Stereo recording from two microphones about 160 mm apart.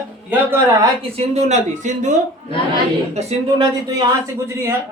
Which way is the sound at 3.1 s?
40° right (ahead or behind).